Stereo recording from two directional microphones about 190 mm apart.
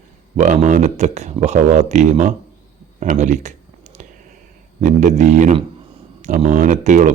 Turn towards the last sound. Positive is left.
turn(degrees=-40)  # may be behind; listen again after turning